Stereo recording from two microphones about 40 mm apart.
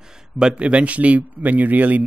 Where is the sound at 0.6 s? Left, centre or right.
Right.